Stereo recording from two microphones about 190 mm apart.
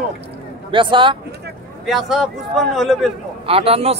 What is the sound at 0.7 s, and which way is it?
Speech, 25° right (ahead or behind).